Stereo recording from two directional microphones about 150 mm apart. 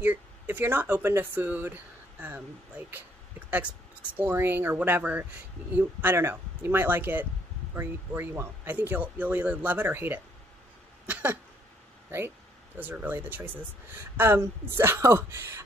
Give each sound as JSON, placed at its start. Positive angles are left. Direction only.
{"t": 0.0, "sound": "speech", "side_deg": -15}
{"t": 3.4, "sound": "speech", "side_deg": -10}
{"t": 11.1, "sound": "cough", "side_deg": -10}
{"t": 12.1, "sound": "speech", "side_deg": -15}